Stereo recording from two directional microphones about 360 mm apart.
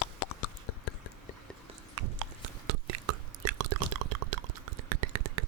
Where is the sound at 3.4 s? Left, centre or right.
Right.